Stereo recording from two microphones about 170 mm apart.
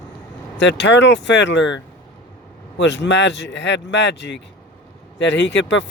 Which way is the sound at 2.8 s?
90° left.